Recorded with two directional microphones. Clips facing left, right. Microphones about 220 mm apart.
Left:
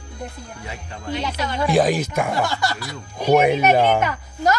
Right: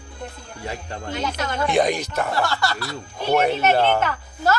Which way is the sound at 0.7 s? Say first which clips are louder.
Left 1 dB; 40° right (ahead or behind).